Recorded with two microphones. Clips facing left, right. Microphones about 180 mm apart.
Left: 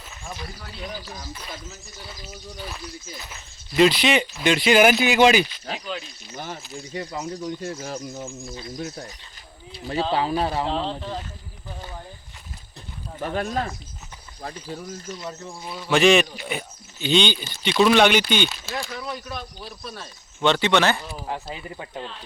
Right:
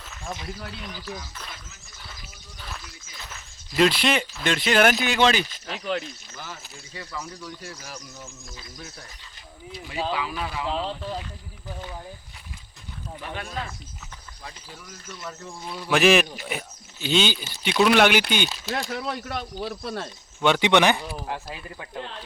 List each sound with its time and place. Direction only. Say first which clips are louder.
3.8 s speech: left 3 dB; centre (ahead or behind)
6.3 s speech: left 6 dB; 30° left (ahead or behind)
9.7 s speech: left 5 dB; 35° left (ahead or behind)
13.1 s speech: left 8 dB; 40° left (ahead or behind)
15.2 s speech: left 3 dB; 20° left (ahead or behind)
15.6 s speech: left 2 dB; centre (ahead or behind)
18.7 s speech: right 2 dB; 70° right (ahead or behind)
20.4 s speech: even; 15° right (ahead or behind)
21.2 s speech: left 2 dB; 20° left (ahead or behind)